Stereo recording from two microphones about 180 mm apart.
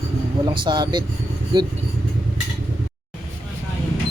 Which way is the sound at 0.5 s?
25° right (ahead or behind).